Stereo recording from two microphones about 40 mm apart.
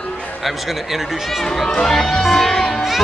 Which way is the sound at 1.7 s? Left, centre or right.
Centre.